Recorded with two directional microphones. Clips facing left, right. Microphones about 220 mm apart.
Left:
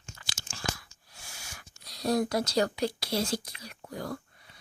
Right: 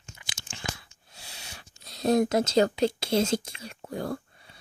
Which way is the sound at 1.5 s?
25° right (ahead or behind).